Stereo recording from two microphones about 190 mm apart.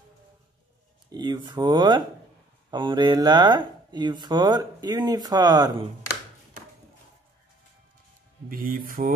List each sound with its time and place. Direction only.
1.1 s speech: 20° right (ahead or behind)
8.5 s music: 45° right (ahead or behind)